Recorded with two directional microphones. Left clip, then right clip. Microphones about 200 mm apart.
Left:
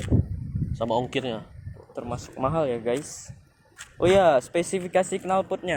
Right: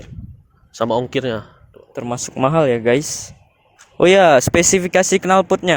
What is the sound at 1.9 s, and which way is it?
Speech, 55° right (ahead or behind).